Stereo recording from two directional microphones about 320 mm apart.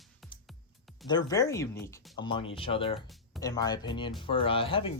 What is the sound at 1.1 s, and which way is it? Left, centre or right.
Speech, centre.